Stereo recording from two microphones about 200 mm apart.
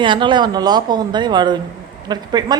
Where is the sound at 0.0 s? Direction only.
25° right (ahead or behind).